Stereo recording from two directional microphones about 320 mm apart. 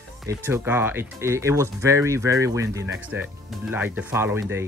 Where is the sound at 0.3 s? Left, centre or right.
Centre.